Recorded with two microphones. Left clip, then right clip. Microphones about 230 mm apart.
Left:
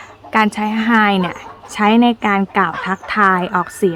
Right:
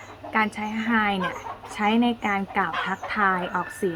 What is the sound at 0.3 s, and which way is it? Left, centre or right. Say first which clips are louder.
Speech: left 9 dB; left.